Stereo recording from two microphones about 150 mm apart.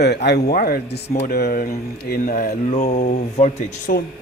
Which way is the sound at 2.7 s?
50° left (ahead or behind).